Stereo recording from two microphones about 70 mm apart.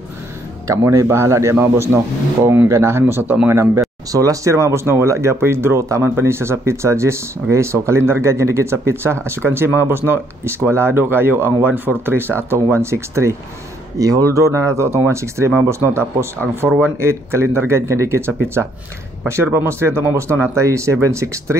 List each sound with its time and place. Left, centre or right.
0.7 s speech: right
4.1 s speech: right
13.9 s speech: right